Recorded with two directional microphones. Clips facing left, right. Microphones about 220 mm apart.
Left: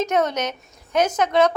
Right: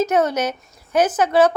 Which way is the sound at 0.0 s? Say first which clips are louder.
Right 3 dB; 5° right (ahead or behind).